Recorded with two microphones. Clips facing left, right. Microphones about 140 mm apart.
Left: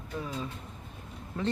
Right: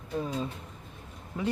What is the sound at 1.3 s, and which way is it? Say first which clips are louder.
Speech: even; 15° right (ahead or behind).